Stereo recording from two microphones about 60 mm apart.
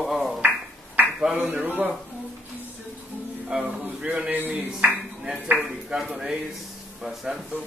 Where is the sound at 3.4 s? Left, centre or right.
Centre.